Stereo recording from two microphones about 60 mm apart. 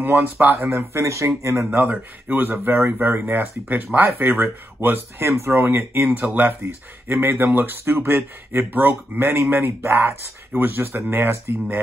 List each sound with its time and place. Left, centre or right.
0.0 s speech: right
0.7 s speech: right
1.7 s speech: right